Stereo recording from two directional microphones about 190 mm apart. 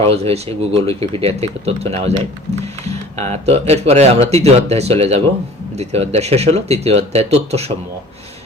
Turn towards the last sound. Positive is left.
turn(degrees=-35)  # may be behind; listen again after turning